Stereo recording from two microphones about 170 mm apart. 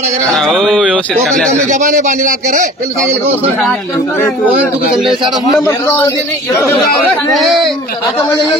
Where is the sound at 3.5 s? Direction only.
Centre (ahead or behind).